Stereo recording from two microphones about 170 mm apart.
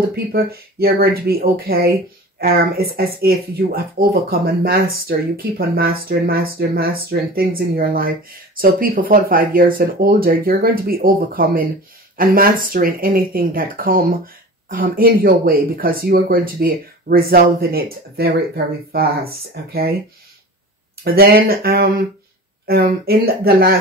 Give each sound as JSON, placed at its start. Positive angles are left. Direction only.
{"t": 0.1, "sound": "speech", "side_deg": -65}
{"t": 19.5, "sound": "speech", "side_deg": -65}
{"t": 21.0, "sound": "speech", "side_deg": -65}